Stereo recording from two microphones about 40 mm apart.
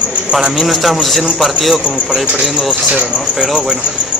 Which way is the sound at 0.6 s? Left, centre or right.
Centre.